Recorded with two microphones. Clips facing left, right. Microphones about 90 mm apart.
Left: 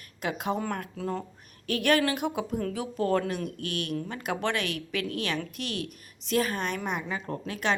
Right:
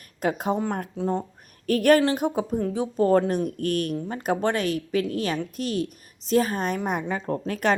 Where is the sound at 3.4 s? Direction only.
45° right (ahead or behind).